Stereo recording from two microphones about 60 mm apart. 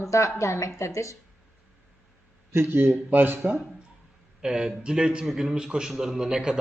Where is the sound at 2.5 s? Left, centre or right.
Right.